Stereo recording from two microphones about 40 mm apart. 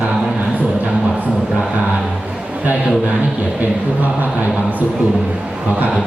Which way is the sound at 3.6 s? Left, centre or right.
Right.